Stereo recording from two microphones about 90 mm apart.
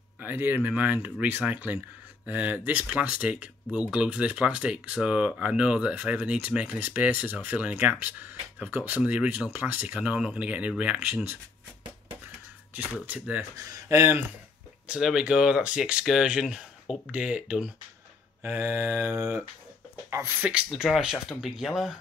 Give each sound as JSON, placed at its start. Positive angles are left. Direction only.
{"t": 0.2, "sound": "speech", "side_deg": -20}
{"t": 13.0, "sound": "speech", "side_deg": -20}
{"t": 13.6, "sound": "speech", "side_deg": -35}
{"t": 14.9, "sound": "speech", "side_deg": -5}
{"t": 20.7, "sound": "speech", "side_deg": 0}